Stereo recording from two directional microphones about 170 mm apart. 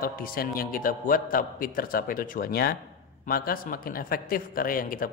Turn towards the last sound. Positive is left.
turn(degrees=55)  # may be behind; listen again after turning